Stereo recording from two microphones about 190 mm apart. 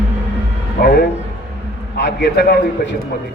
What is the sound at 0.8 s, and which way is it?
Speech, 55° left (ahead or behind).